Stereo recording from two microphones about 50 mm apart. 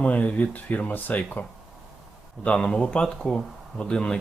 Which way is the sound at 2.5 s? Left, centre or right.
Left.